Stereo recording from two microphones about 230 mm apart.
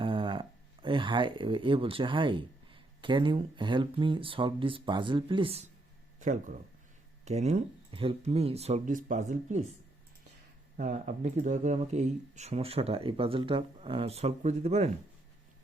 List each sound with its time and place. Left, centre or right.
0.0 s speech: right
10.8 s speech: right